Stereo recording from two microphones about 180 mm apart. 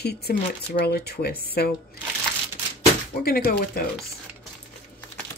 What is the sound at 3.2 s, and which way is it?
Speech, 55° left (ahead or behind).